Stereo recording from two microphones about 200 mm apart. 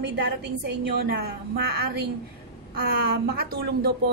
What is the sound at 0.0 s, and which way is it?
A woman's voice, 60° right (ahead or behind).